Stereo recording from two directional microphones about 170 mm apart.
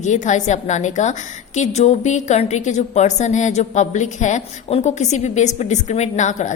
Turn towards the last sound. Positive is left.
turn(degrees=45)  # may be behind; listen again after turning